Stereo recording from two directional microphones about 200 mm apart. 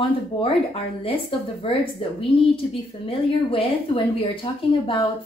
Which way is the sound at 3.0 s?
25° left (ahead or behind).